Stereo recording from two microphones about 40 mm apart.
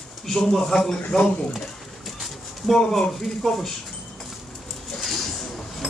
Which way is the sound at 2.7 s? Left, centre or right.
Centre.